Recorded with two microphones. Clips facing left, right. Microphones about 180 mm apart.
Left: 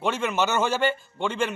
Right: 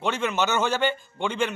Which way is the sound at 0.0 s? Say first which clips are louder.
Even; 5° left (ahead or behind).